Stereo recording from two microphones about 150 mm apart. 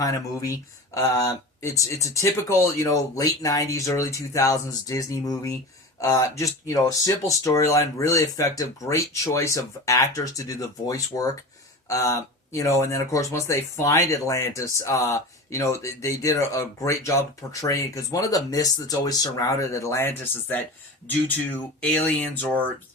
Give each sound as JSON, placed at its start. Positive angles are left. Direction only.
{"t": 0.0, "sound": "speech", "side_deg": 25}
{"t": 21.8, "sound": "speech", "side_deg": 10}